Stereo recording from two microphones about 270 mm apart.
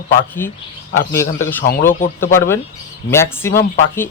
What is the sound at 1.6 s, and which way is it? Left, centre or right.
Speech, left.